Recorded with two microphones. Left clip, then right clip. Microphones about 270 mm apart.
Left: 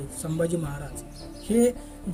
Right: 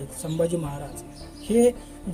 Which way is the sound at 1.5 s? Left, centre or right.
Centre.